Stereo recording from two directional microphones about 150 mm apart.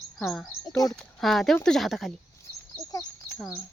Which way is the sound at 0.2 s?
Centre (ahead or behind).